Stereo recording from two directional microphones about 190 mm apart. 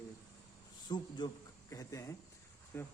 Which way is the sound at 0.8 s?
25° left (ahead or behind).